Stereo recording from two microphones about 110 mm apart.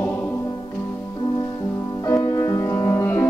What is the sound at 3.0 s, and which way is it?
Music, 20° left (ahead or behind).